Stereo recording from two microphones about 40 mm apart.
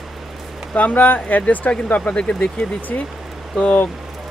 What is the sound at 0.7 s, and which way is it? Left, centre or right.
Speech, left.